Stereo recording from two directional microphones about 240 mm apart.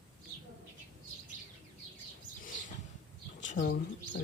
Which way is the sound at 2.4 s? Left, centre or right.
Left.